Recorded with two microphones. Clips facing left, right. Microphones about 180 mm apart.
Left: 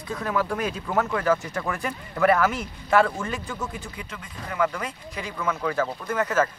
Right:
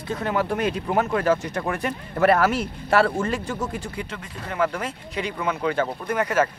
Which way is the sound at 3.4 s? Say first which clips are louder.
Right 4 dB; 30° right (ahead or behind).